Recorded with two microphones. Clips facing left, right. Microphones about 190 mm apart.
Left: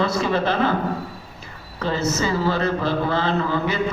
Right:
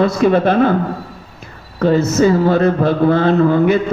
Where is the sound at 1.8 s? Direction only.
55° right (ahead or behind).